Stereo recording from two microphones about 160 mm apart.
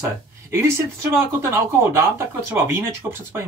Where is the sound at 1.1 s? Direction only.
15° right (ahead or behind).